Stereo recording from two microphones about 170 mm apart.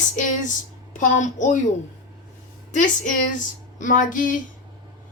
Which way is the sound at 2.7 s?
50° left (ahead or behind).